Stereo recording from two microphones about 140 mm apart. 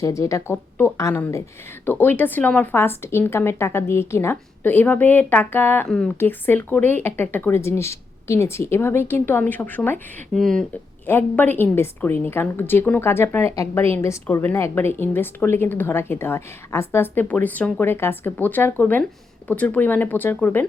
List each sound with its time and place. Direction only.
0.0 s a woman's voice: 20° left (ahead or behind)
10.3 s speech: 5° left (ahead or behind)
11.0 s a woman's voice: 15° left (ahead or behind)